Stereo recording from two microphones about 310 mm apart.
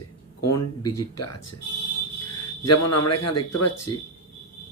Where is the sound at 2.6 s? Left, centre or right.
Left.